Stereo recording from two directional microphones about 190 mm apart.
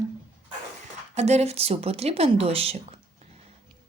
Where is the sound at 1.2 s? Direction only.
35° right (ahead or behind).